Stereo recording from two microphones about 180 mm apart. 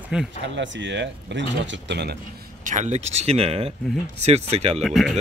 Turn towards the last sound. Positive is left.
turn(degrees=0)  # may be behind; listen again after turning